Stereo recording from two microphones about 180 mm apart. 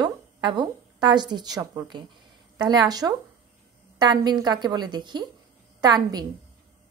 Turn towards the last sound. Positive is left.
turn(degrees=-20)  # may be behind; listen again after turning